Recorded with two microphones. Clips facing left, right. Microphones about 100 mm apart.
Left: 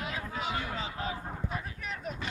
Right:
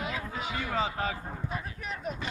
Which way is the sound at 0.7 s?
75° right (ahead or behind).